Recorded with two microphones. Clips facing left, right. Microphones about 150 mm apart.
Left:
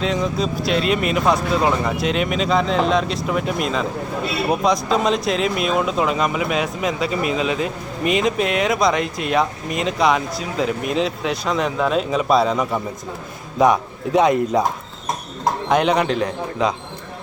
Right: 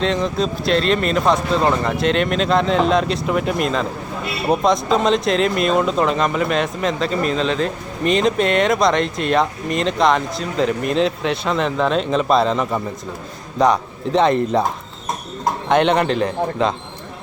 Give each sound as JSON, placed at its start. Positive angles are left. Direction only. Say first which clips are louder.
{"t": 0.0, "sound": "speech", "louder": "right 2 dB", "side_deg": 5}
{"t": 15.7, "sound": "speech", "louder": "right 2 dB", "side_deg": 5}